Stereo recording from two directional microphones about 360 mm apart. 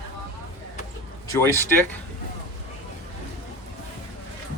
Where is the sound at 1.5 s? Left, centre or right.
Centre.